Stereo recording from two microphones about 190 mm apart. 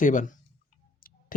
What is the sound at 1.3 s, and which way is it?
Tick-tock, 45° left (ahead or behind).